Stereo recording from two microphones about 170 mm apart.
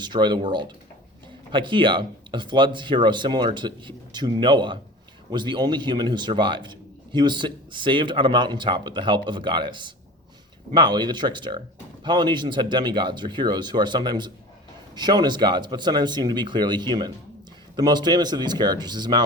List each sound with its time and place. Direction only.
0.0 s a man's voice: 25° right (ahead or behind)